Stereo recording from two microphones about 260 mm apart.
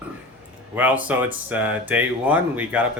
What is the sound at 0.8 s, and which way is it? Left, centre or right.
Speech, centre.